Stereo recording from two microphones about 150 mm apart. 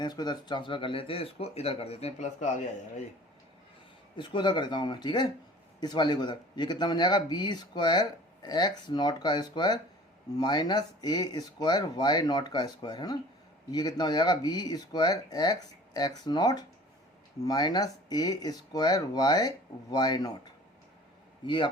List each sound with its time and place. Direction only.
0.0 s speech: 30° left (ahead or behind); by 2.6 s 55° left (ahead or behind)
4.2 s speech: 30° left (ahead or behind)